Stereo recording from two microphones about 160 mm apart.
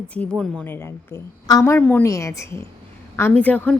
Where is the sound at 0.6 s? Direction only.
15° left (ahead or behind).